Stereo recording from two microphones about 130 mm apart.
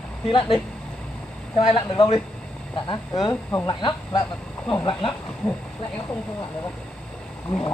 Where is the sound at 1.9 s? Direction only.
40° left (ahead or behind).